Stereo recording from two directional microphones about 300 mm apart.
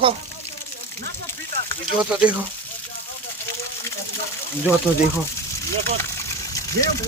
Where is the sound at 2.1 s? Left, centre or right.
Centre.